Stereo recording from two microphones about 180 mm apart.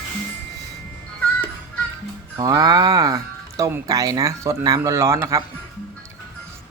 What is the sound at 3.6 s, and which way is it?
Speech, 20° right (ahead or behind).